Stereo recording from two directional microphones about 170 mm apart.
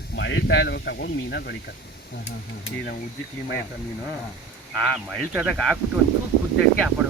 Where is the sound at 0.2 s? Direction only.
90° left; by 1.5 s 75° left (ahead or behind).